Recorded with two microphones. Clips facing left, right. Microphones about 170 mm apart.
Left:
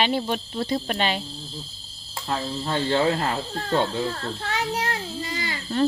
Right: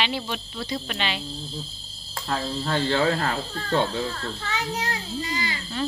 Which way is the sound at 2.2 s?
15° left (ahead or behind).